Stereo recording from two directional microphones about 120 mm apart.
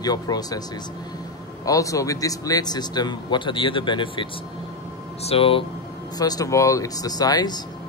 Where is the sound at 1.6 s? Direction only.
25° left (ahead or behind); by 5.6 s 50° left (ahead or behind).